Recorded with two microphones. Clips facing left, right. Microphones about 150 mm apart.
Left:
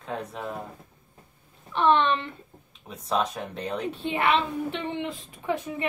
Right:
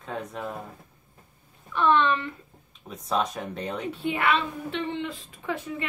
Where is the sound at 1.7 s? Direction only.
20° left (ahead or behind).